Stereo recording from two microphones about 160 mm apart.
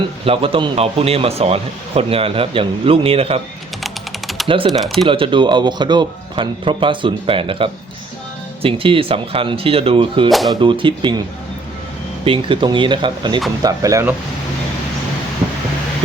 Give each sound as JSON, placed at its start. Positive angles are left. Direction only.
{"t": 0.3, "sound": "speech", "side_deg": -35}
{"t": 3.8, "sound": "typing", "side_deg": 0}
{"t": 4.4, "sound": "speech", "side_deg": -35}
{"t": 4.8, "sound": "speech", "side_deg": 0}
{"t": 5.0, "sound": "speech", "side_deg": -35}
{"t": 10.2, "sound": "speech", "side_deg": 0}
{"t": 10.5, "sound": "speech", "side_deg": -30}
{"t": 12.2, "sound": "speech", "side_deg": -35}